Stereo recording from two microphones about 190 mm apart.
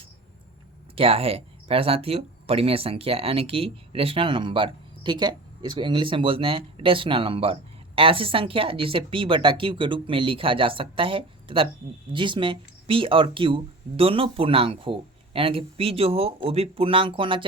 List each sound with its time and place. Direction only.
0.9 s speech: 30° right (ahead or behind)